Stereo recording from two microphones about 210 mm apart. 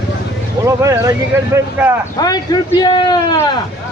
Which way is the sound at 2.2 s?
15° left (ahead or behind).